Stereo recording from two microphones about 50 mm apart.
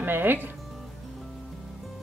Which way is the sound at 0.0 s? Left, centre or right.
Right.